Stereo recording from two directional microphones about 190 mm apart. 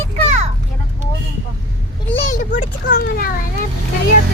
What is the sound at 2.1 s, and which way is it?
A child's voice, 45° left (ahead or behind).